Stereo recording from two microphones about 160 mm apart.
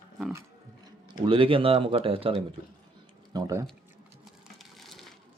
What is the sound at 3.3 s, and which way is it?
Speech, 20° right (ahead or behind).